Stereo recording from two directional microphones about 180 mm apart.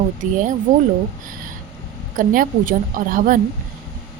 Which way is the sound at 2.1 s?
50° right (ahead or behind).